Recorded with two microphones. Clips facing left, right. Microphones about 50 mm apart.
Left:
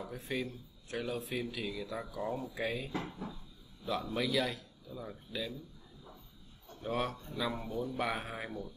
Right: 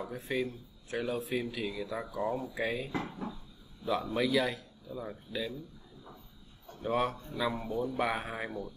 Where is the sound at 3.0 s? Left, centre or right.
Centre.